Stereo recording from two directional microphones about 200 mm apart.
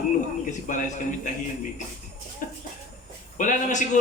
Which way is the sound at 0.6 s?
40° left (ahead or behind).